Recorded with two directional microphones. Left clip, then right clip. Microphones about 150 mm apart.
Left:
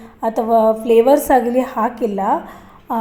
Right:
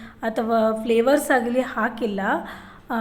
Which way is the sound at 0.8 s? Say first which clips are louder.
Left 7 dB; 30° left (ahead or behind).